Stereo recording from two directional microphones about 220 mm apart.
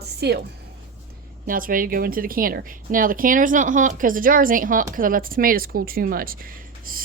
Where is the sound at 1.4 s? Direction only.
40° right (ahead or behind).